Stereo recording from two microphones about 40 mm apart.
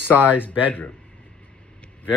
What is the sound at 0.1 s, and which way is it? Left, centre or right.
Speech, right.